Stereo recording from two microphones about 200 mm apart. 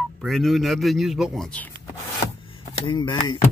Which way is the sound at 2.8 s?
25° left (ahead or behind).